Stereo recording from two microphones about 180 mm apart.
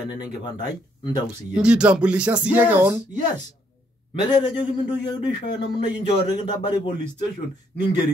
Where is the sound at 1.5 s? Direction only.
5° right (ahead or behind).